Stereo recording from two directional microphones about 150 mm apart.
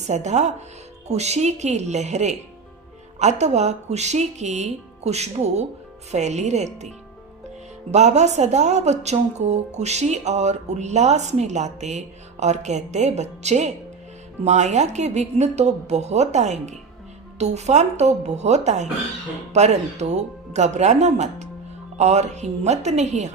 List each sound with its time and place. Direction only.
0.1 s a woman's voice: 50° right (ahead or behind)
7.9 s a woman's voice: 50° right (ahead or behind)